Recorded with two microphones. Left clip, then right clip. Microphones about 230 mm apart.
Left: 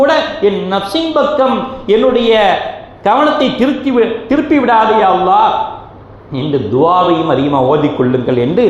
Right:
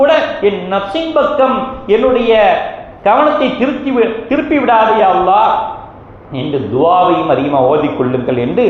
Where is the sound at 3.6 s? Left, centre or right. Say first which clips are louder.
Left 1 dB; left.